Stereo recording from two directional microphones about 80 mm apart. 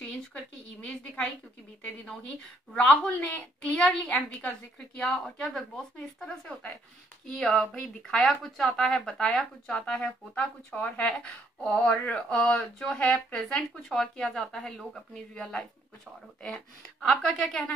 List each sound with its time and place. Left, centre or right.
0.0 s a woman's voice: centre
2.7 s speech: centre
11.9 s a sound: left
12.2 s a woman's voice: centre